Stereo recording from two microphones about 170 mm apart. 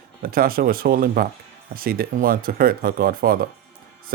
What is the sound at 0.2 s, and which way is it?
Speech, 60° right (ahead or behind).